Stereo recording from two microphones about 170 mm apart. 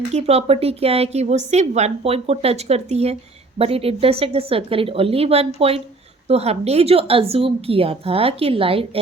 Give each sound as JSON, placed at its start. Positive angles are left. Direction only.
{"t": 0.1, "sound": "a woman's voice", "side_deg": -40}